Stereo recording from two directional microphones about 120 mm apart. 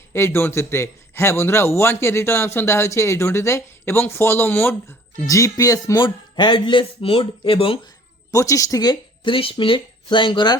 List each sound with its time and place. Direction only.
0.1 s a man's voice: 20° left (ahead or behind); by 7.8 s 45° left (ahead or behind)
8.3 s speech: 30° left (ahead or behind)